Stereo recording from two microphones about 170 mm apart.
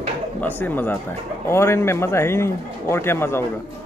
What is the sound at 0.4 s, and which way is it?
Speech, 10° left (ahead or behind).